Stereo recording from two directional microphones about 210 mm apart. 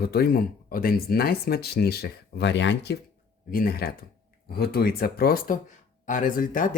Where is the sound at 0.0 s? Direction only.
50° left (ahead or behind).